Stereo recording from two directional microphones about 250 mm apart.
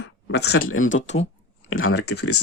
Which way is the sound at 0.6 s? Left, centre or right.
Left.